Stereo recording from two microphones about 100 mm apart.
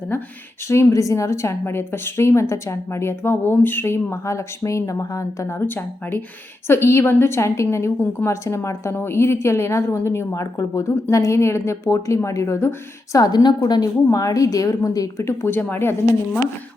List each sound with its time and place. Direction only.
0.7 s a woman's voice: 30° left (ahead or behind)
13.1 s a woman's voice: 45° left (ahead or behind)
15.3 s a woman's voice: 25° left (ahead or behind)